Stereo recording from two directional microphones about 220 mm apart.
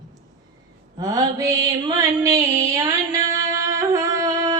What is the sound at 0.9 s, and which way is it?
Mantra, 15° right (ahead or behind).